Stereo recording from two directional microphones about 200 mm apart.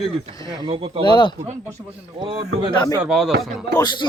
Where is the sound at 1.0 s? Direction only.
25° left (ahead or behind).